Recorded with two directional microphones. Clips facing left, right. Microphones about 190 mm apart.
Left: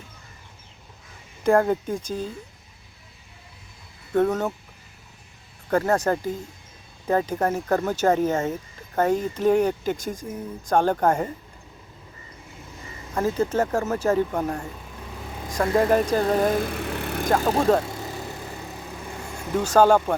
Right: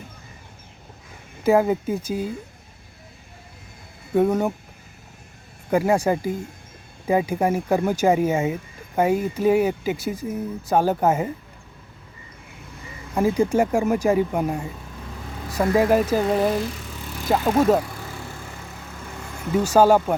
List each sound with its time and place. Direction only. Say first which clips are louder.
1.5 s speech: right 1 dB; 5° right (ahead or behind)
4.1 s speech: right 2 dB; 10° right (ahead or behind)
5.7 s speech: right 2 dB; 10° right (ahead or behind)
13.1 s speech: right 3 dB; 10° right (ahead or behind)
16.5 s vehicle: left 1 dB; 55° left (ahead or behind)
17.2 s speech: right 1 dB; 5° right (ahead or behind)
17.8 s vehicle: left 3 dB; 25° left (ahead or behind)
19.5 s speech: right 1 dB; 10° right (ahead or behind)